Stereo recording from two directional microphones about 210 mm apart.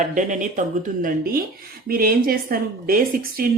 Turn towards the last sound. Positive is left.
turn(degrees=-45)  # may be behind; listen again after turning